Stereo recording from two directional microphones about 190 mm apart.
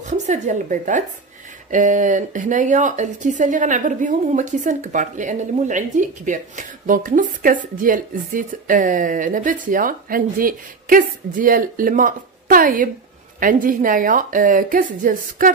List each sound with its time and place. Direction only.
0.0 s a woman's voice: 40° right (ahead or behind)